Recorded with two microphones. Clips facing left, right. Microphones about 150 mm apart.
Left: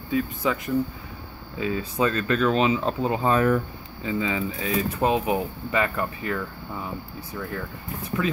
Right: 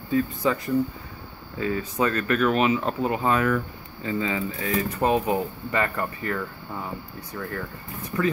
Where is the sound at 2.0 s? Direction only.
25° left (ahead or behind).